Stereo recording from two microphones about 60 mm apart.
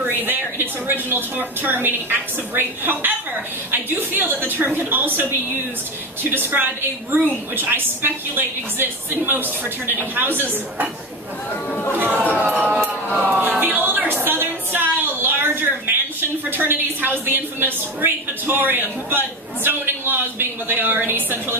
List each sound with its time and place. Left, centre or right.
0.3 s a woman's voice: right
6.3 s a woman's voice: right
12.1 s speech: left
13.1 s a sound: right
16.5 s a woman's voice: right